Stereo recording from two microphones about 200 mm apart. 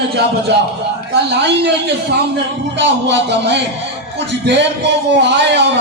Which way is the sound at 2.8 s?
60° right (ahead or behind).